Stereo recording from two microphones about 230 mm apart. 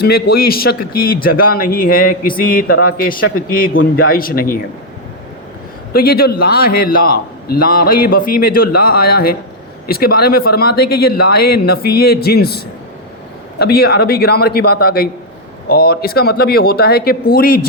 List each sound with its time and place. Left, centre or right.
0.0 s a man's voice: left
5.9 s a man's voice: left